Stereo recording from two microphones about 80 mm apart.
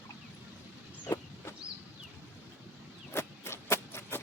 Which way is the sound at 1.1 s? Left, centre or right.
Left.